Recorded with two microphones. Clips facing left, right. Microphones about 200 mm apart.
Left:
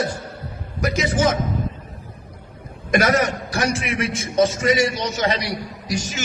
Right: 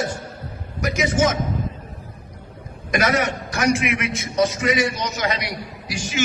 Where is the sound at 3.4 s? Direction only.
30° left (ahead or behind).